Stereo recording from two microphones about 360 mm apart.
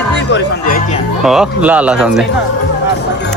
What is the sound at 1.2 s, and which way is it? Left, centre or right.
Speech, centre.